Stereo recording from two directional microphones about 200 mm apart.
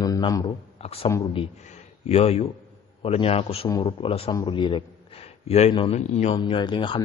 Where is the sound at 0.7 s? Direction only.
30° left (ahead or behind).